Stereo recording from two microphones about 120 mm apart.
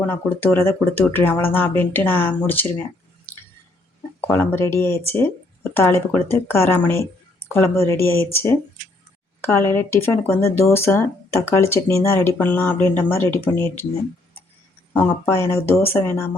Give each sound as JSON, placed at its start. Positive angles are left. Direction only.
{"t": 0.0, "sound": "speech", "side_deg": 20}
{"t": 4.3, "sound": "speech", "side_deg": 20}
{"t": 14.9, "sound": "speech", "side_deg": 20}